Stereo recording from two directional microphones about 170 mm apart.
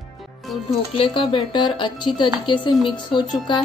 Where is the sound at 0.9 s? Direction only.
30° left (ahead or behind).